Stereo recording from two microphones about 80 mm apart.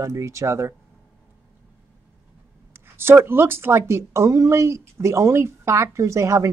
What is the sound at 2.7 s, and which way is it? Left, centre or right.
A woman's voice, right.